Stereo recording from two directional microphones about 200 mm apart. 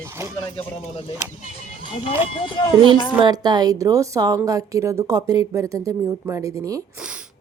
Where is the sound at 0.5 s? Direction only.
30° left (ahead or behind).